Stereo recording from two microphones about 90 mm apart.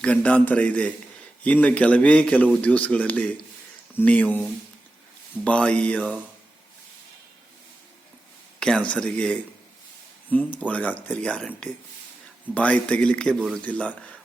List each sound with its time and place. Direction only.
0.0 s speech: 15° left (ahead or behind)
5.5 s speech: 15° left (ahead or behind)
8.5 s speech: 10° left (ahead or behind)
10.6 s speech: 15° left (ahead or behind)